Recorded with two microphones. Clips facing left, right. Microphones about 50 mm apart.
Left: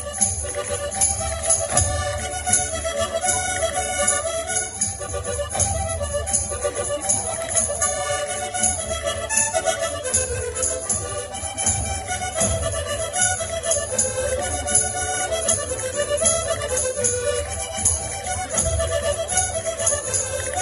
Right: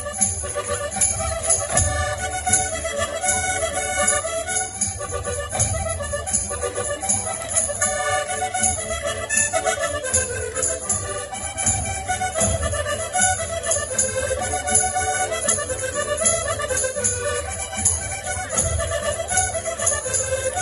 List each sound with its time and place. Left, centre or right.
1.7 s music: centre
7.8 s music: centre
12.4 s music: centre
14.8 s organ: right
15.3 s music: centre
18.6 s music: centre